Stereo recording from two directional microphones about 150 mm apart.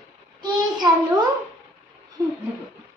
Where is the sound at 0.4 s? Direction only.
30° right (ahead or behind).